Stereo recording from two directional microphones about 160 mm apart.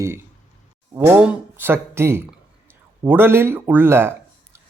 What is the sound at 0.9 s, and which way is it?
Speech, 10° right (ahead or behind).